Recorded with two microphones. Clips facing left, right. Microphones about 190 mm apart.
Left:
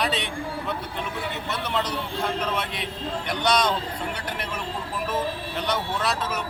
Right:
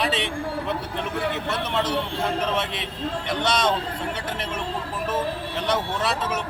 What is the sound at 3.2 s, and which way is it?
Speech, 25° right (ahead or behind).